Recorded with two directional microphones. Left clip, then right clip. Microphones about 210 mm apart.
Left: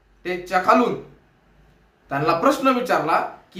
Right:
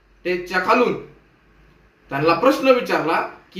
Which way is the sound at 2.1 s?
20° left (ahead or behind).